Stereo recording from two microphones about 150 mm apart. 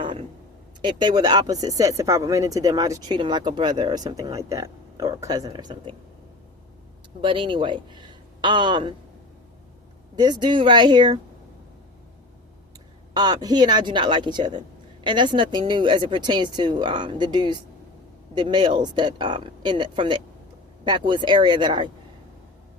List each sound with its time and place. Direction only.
0.8 s speech: 30° right (ahead or behind)
7.2 s speech: 35° right (ahead or behind)
10.2 s speech: 30° right (ahead or behind)
13.1 s speech: 25° right (ahead or behind)